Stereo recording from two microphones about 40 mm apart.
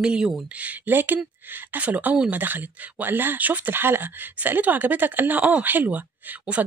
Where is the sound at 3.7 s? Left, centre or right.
Right.